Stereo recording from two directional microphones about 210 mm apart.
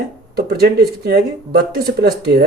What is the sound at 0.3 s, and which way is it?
Speech, 50° right (ahead or behind).